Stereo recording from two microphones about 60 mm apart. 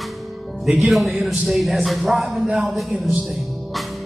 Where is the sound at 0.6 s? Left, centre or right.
Centre.